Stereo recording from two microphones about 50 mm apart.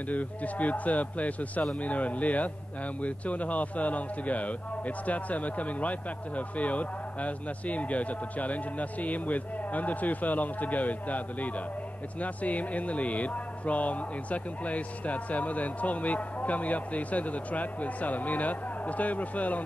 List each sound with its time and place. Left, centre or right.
0.1 s a man's voice: left